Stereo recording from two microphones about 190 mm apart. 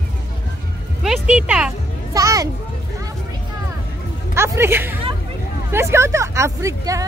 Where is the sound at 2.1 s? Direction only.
15° right (ahead or behind).